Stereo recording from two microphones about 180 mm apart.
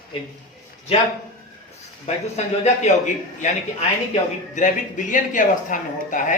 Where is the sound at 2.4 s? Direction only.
40° left (ahead or behind).